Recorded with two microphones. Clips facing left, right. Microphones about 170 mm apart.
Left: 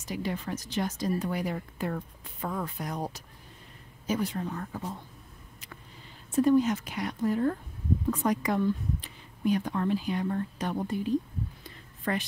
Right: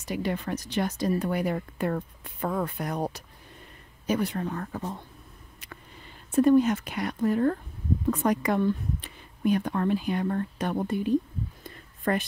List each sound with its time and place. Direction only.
0.0 s a woman's voice: 60° right (ahead or behind)
6.3 s a woman's voice: 60° right (ahead or behind)
11.6 s a sound: 50° right (ahead or behind)